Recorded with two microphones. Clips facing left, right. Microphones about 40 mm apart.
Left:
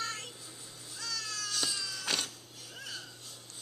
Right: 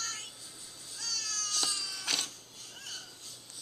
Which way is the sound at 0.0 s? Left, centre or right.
Centre.